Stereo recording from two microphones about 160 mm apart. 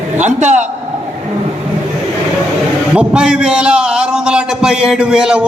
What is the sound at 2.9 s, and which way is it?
A man's voice, 5° right (ahead or behind).